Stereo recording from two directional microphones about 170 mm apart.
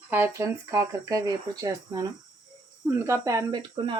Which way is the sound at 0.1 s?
15° right (ahead or behind).